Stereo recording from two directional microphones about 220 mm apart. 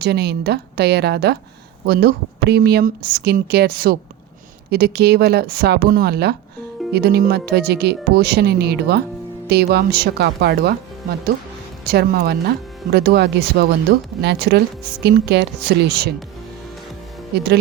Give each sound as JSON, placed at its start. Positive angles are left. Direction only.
{"t": 0.0, "sound": "speech", "side_deg": -45}
{"t": 11.9, "sound": "speech", "side_deg": -45}
{"t": 17.3, "sound": "speech", "side_deg": -50}